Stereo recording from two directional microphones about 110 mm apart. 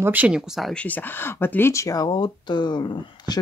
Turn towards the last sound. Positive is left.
turn(degrees=40)  # may be behind; listen again after turning